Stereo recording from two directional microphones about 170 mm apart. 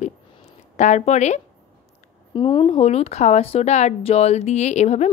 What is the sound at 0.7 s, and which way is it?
Speech, 45° left (ahead or behind).